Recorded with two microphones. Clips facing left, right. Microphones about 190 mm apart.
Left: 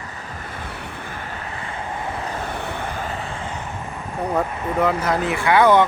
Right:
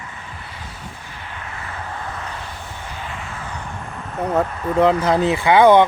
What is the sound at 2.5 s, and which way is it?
Vehicle, 65° left (ahead or behind).